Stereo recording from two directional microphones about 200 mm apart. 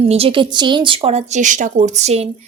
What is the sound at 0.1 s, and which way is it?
Speech, 25° right (ahead or behind).